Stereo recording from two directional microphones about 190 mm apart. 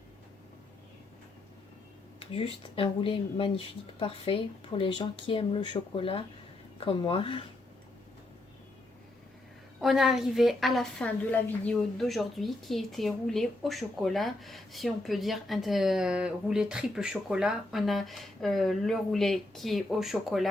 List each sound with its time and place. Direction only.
2.1 s a sound: 30° left (ahead or behind)
2.6 s speech: 30° left (ahead or behind)
9.8 s a woman's voice: centre (ahead or behind)